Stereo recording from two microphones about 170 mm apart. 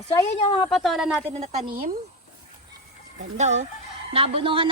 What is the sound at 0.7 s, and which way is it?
Speech, centre (ahead or behind).